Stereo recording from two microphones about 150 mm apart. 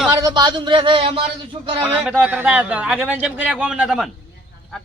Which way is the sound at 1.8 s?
5° right (ahead or behind).